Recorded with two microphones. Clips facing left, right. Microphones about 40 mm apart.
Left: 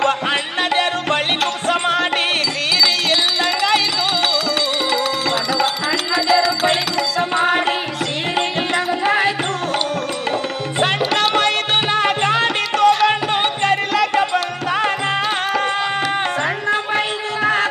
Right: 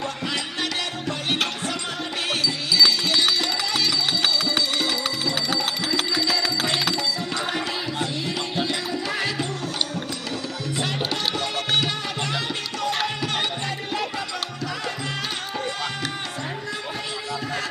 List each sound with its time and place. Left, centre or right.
0.3 s music: left
6.1 s music: left
7.3 s music: left
8.4 s tabla: left
11.1 s music: left
11.9 s music: left
14.2 s music: left
16.6 s a sound: left
17.4 s music: left